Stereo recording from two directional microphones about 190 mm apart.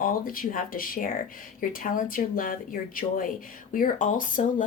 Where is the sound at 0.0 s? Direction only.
50° left (ahead or behind).